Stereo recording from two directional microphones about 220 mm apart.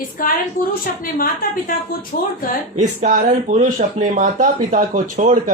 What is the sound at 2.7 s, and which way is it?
Speech, 35° right (ahead or behind).